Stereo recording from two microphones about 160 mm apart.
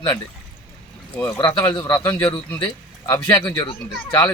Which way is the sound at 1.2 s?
20° left (ahead or behind).